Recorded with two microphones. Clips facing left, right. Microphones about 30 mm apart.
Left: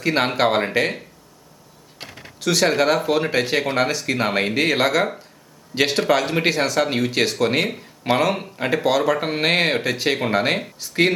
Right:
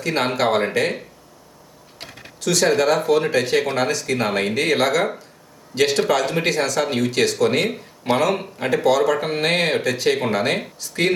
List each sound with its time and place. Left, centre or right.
0.0 s speech: centre
2.4 s speech: centre